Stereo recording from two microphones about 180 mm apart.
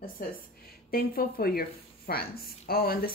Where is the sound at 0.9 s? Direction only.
55° left (ahead or behind).